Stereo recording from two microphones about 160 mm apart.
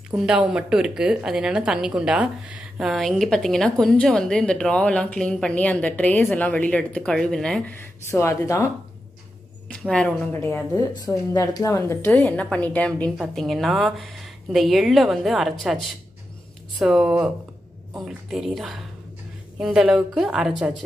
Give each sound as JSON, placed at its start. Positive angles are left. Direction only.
{"t": 0.1, "sound": "a woman's voice", "side_deg": -5}
{"t": 8.1, "sound": "speech", "side_deg": 20}
{"t": 9.7, "sound": "a woman's voice", "side_deg": 5}
{"t": 10.9, "sound": "a woman's voice", "side_deg": 20}